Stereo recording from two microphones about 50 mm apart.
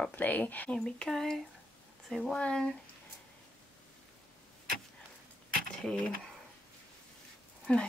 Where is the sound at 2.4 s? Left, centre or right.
Centre.